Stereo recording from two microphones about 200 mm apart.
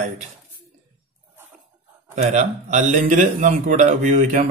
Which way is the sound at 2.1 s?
35° right (ahead or behind).